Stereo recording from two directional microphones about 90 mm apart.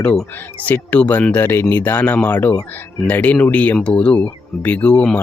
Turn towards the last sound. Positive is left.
turn(degrees=15)  # may be behind; listen again after turning